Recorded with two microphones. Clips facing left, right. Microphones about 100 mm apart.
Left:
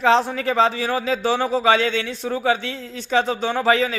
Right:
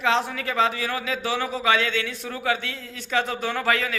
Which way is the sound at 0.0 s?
30° left (ahead or behind).